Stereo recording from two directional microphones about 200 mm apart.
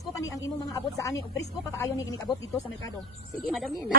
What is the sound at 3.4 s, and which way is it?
Speech, centre (ahead or behind).